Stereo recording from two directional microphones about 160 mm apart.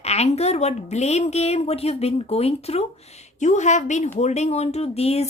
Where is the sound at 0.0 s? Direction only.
40° left (ahead or behind).